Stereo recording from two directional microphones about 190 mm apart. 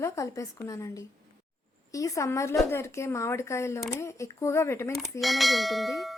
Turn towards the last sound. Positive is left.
turn(degrees=0)  # may be behind; listen again after turning